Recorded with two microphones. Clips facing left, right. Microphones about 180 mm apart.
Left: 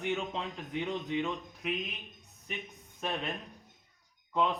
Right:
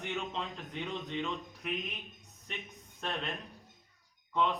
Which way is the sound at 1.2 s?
15° left (ahead or behind).